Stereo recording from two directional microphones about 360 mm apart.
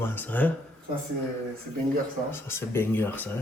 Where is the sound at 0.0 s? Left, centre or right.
Centre.